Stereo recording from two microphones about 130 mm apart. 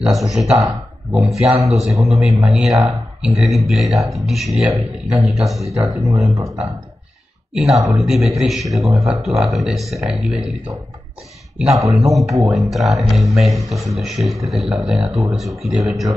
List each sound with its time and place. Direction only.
0.1 s a man's voice: centre (ahead or behind)
5.8 s speech: 25° right (ahead or behind)
7.5 s a man's voice: 5° right (ahead or behind)
11.5 s a man's voice: centre (ahead or behind)